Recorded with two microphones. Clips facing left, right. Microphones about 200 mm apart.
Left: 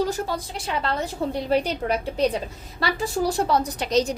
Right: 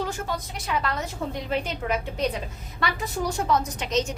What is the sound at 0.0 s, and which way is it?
A woman's voice, 35° left (ahead or behind).